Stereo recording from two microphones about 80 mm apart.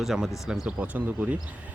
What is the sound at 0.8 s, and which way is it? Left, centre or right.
Speech, centre.